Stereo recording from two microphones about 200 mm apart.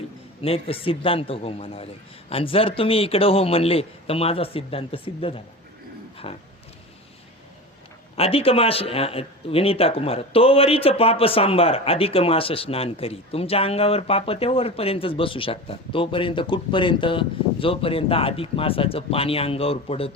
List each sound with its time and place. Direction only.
0.4 s speech: 30° left (ahead or behind)
8.1 s speech: 30° left (ahead or behind)